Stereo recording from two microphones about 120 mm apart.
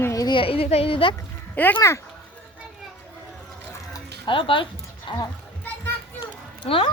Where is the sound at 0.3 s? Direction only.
45° left (ahead or behind).